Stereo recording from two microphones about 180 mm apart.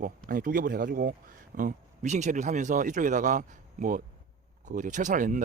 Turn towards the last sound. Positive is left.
turn(degrees=-45)  # may be behind; listen again after turning